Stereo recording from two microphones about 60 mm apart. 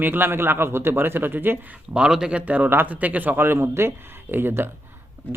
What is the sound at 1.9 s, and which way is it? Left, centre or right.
Speech, centre.